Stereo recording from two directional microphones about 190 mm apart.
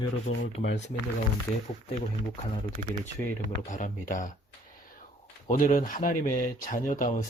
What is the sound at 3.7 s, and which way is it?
Speech, 40° left (ahead or behind).